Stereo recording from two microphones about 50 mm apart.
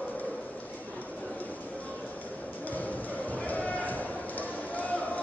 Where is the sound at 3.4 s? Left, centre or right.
Left.